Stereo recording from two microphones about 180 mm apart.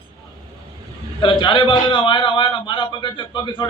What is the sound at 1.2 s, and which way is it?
A man's voice, 25° left (ahead or behind).